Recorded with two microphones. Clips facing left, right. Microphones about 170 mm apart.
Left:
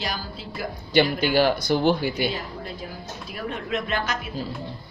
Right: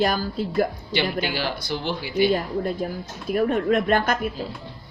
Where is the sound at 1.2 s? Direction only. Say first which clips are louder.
Left 7 dB; 50° left (ahead or behind).